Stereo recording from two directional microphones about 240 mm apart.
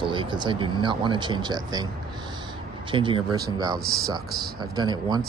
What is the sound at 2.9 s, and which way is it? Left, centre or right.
Speech, centre.